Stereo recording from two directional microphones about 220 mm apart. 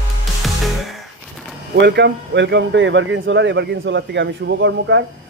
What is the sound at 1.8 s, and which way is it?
Speech, 50° right (ahead or behind).